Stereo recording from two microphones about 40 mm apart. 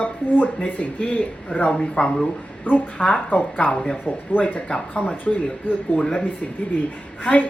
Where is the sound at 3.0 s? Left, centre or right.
Left.